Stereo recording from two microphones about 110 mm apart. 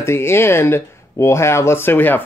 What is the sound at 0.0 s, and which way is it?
Speech, 25° left (ahead or behind).